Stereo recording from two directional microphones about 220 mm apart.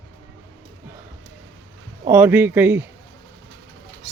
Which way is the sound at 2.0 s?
10° right (ahead or behind).